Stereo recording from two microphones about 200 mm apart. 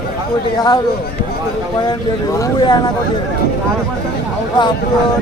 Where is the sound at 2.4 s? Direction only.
20° left (ahead or behind).